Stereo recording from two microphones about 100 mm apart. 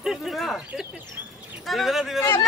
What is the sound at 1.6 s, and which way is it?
Speech, centre (ahead or behind).